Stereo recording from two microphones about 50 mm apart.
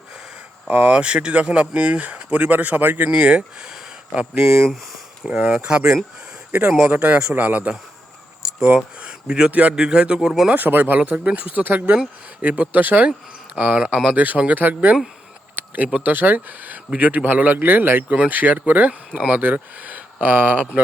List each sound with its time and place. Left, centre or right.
0.7 s speech: right
3.1 s speech: right
4.6 s speech: centre
5.2 s speech: right
9.7 s speech: centre
10.5 s speech: right
13.6 s speech: right
15.5 s a sound: right
16.0 s speech: right
18.1 s speech: right